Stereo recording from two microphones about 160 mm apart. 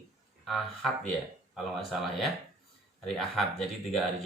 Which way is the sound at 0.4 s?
Centre (ahead or behind).